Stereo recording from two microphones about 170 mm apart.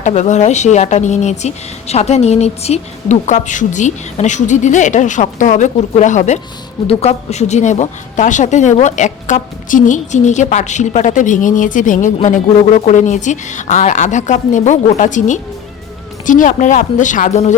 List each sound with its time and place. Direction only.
0.0 s a woman's voice: 45° left (ahead or behind)